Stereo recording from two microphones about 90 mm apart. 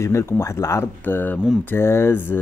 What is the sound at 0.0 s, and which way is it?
Speech, 30° left (ahead or behind).